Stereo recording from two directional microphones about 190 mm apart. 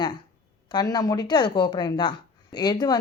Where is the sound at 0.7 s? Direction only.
20° left (ahead or behind).